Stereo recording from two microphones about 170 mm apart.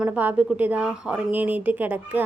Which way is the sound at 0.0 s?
10° right (ahead or behind).